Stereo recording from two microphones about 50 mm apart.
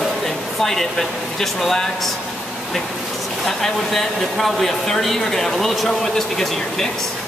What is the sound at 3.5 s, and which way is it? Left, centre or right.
Speech, centre.